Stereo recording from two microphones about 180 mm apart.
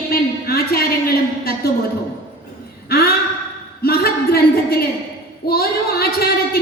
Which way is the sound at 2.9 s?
60° left (ahead or behind).